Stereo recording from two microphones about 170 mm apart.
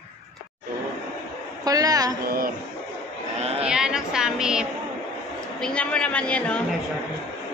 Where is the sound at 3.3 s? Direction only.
35° right (ahead or behind).